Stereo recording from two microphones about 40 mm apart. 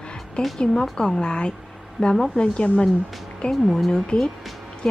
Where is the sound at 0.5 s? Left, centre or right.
Centre.